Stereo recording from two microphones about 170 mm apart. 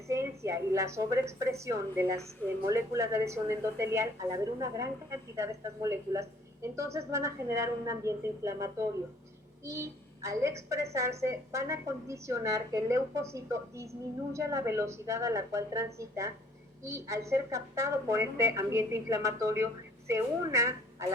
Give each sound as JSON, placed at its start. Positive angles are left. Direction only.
{"t": 0.1, "sound": "a woman's voice", "side_deg": -15}